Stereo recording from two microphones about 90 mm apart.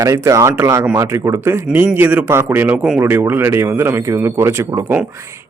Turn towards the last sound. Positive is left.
turn(degrees=-30)  # may be behind; listen again after turning